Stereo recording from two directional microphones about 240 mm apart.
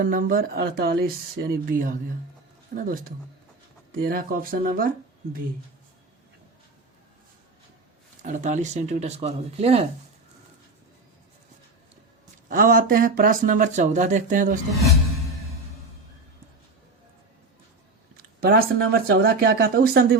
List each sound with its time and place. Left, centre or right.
0.0 s speech: right
8.2 s speech: right
12.5 s speech: right
18.3 s speech: right